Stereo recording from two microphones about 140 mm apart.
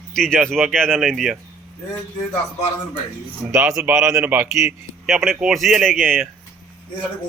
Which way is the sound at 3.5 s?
20° right (ahead or behind).